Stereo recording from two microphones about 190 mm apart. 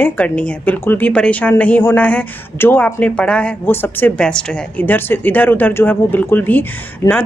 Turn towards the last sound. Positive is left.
turn(degrees=10)  # may be behind; listen again after turning